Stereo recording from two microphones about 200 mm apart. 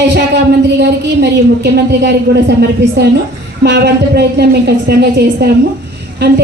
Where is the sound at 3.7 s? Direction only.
55° right (ahead or behind).